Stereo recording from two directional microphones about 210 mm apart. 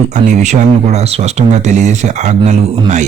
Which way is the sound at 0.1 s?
35° right (ahead or behind).